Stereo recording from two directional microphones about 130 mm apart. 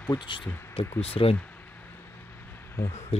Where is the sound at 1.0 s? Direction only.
50° left (ahead or behind).